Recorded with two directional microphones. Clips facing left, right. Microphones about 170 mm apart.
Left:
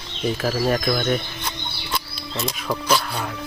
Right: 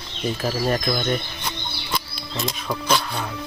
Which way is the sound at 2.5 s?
5° left (ahead or behind).